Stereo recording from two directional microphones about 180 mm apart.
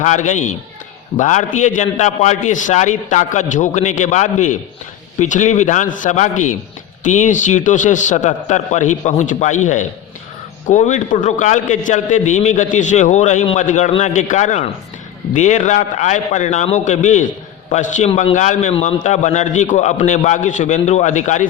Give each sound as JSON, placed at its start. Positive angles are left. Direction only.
{"t": 0.0, "sound": "a man's voice", "side_deg": 40}